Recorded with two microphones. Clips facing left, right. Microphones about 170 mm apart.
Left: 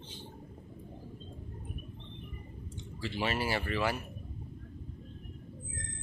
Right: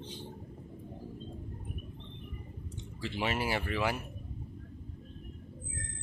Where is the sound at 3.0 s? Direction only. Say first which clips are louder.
Even; 15° right (ahead or behind).